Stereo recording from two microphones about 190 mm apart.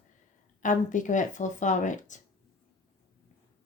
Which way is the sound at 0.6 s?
40° left (ahead or behind).